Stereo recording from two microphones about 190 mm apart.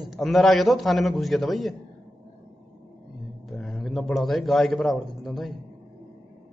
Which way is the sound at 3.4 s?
Centre (ahead or behind).